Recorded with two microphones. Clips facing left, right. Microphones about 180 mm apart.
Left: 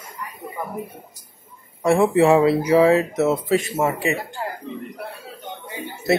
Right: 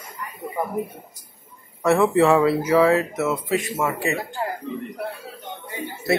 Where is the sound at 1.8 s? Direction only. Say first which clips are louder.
Left 1 dB; 15° left (ahead or behind).